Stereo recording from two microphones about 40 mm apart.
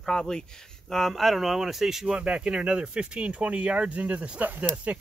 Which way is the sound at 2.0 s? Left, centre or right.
Right.